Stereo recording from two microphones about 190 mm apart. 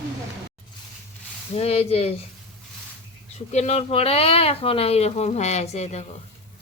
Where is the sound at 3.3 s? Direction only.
35° left (ahead or behind).